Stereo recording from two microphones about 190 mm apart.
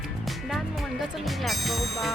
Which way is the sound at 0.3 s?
Centre (ahead or behind).